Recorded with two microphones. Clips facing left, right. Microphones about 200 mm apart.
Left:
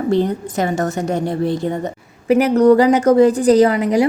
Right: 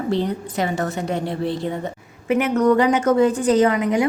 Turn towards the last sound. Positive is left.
turn(degrees=35)  # may be behind; listen again after turning